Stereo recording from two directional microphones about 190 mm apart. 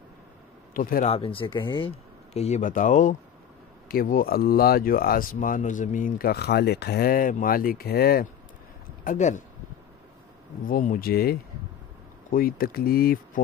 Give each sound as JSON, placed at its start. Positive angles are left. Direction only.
{"t": 0.7, "sound": "speech", "side_deg": 50}
{"t": 1.0, "sound": "speech", "side_deg": 30}
{"t": 9.0, "sound": "speech", "side_deg": 40}
{"t": 10.7, "sound": "speech", "side_deg": 45}